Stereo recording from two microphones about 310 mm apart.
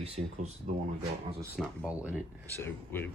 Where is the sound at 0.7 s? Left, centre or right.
Right.